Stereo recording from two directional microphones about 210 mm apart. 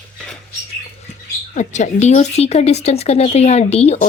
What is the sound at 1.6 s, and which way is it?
Speech, 35° left (ahead or behind).